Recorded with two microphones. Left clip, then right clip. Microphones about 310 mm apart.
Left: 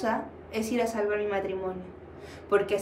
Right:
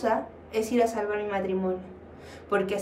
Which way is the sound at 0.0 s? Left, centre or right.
Centre.